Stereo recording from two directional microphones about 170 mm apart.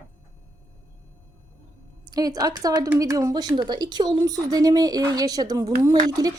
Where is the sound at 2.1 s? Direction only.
20° right (ahead or behind).